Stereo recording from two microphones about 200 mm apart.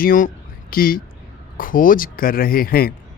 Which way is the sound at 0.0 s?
45° left (ahead or behind).